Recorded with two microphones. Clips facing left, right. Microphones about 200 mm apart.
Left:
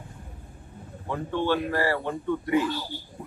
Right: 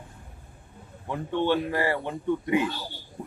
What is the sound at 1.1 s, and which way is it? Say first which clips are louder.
Speech: right 1 dB; 20° right (ahead or behind).